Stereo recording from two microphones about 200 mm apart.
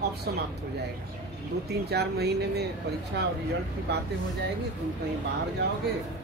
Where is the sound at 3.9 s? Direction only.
55° right (ahead or behind).